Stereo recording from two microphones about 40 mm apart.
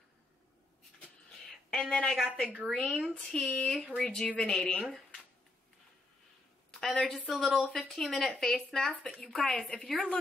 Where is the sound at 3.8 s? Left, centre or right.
Centre.